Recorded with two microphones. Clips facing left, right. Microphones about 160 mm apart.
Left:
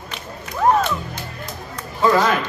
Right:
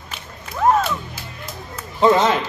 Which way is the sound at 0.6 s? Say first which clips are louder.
Even; 5° right (ahead or behind).